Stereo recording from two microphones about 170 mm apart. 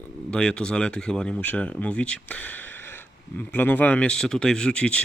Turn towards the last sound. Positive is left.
turn(degrees=5)  # may be behind; listen again after turning